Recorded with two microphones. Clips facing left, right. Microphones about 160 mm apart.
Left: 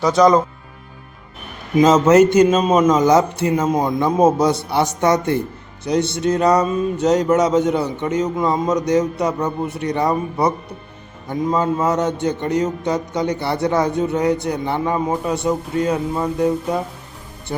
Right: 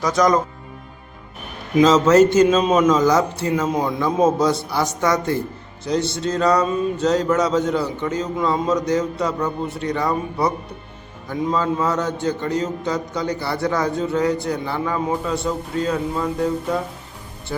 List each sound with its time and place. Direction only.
0.0 s a man's voice: 30° left (ahead or behind)
1.8 s a man's voice: 20° left (ahead or behind)